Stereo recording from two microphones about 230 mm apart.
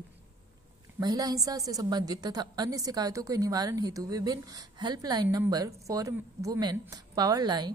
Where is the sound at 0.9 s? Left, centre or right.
Centre.